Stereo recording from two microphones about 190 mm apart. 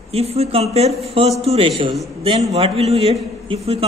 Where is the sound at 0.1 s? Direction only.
35° right (ahead or behind).